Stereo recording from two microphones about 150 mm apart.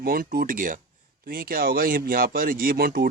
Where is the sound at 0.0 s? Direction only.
75° right (ahead or behind).